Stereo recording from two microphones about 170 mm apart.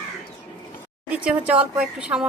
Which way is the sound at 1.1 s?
5° right (ahead or behind).